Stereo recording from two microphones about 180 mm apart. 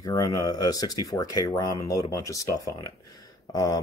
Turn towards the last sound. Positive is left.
turn(degrees=20)  # may be behind; listen again after turning